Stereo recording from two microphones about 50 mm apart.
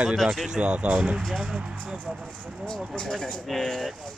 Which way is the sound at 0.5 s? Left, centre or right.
Right.